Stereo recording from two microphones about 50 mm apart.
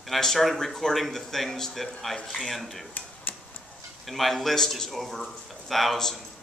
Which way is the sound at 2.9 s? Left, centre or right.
Left.